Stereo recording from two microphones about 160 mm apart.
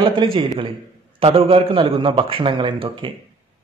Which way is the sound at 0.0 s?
30° right (ahead or behind).